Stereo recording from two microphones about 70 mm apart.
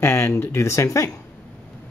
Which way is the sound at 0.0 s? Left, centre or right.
Left.